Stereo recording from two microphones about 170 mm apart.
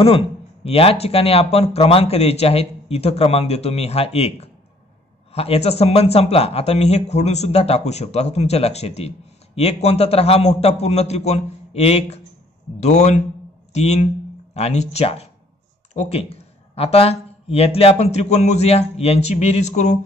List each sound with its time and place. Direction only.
0.7 s speech: 35° left (ahead or behind)